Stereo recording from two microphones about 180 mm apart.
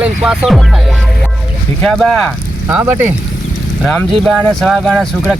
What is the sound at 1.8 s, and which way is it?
Speech, centre (ahead or behind).